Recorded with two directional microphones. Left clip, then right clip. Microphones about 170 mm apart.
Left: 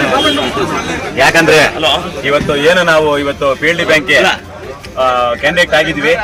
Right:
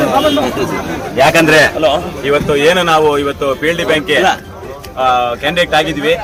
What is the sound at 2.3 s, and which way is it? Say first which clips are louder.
A man's voice: left 1 dB; 15° right (ahead or behind).